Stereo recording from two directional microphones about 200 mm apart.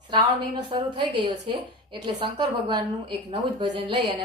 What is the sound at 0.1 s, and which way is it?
A woman's voice, 20° right (ahead or behind).